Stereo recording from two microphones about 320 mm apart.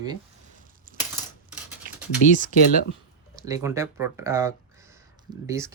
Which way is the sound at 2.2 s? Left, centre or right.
Left.